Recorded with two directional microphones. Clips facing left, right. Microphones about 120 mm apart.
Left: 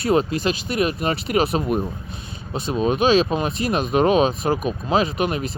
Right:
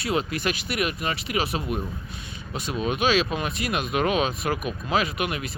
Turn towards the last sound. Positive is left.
turn(degrees=35)  # may be behind; listen again after turning